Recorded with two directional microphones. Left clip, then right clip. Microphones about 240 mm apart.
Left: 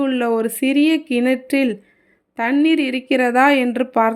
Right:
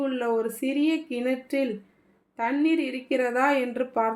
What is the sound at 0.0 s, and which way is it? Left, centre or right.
A woman's voice, left.